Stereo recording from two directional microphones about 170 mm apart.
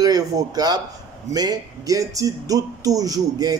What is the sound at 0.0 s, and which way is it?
Speech, 20° right (ahead or behind).